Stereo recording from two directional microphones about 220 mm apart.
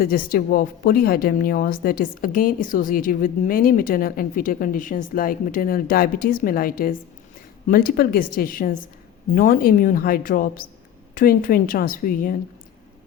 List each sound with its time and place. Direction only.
0.0 s speech: 40° left (ahead or behind)